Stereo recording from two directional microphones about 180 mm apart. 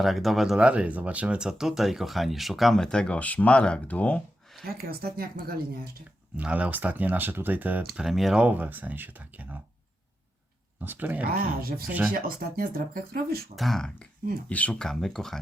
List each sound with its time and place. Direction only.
0.0 s speech: centre (ahead or behind)
4.8 s speech: 60° right (ahead or behind)
6.3 s speech: 5° right (ahead or behind)
10.8 s speech: 10° right (ahead or behind)
11.3 s speech: 55° right (ahead or behind)
13.6 s speech: centre (ahead or behind)